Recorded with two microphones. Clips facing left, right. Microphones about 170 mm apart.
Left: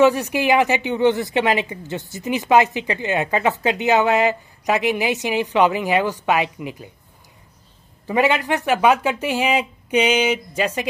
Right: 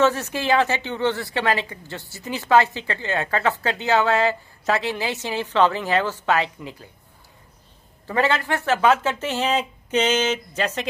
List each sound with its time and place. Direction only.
0.0 s a woman's voice: 15° left (ahead or behind)
8.1 s a woman's voice: 15° left (ahead or behind)